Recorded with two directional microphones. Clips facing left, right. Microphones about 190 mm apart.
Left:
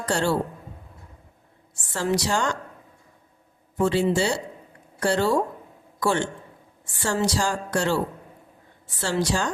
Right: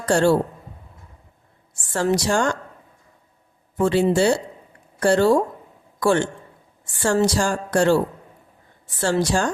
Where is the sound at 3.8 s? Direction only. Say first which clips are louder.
Right 4 dB; 55° right (ahead or behind).